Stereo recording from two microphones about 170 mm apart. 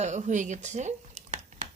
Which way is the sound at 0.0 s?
45° right (ahead or behind).